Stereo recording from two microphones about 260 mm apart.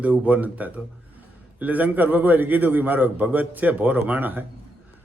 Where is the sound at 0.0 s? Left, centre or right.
Centre.